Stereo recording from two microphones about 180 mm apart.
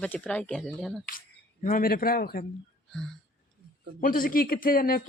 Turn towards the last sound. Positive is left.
turn(degrees=55)  # may be behind; listen again after turning